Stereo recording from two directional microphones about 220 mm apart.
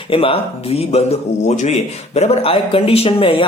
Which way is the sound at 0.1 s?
25° left (ahead or behind).